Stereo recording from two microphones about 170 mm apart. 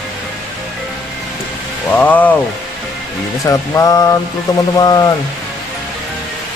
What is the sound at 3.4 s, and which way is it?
Music, 20° left (ahead or behind).